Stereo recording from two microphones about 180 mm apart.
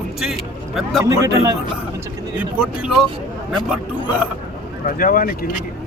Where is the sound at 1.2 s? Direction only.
15° right (ahead or behind).